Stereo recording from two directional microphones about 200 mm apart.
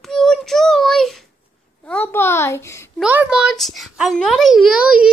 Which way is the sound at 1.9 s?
10° left (ahead or behind).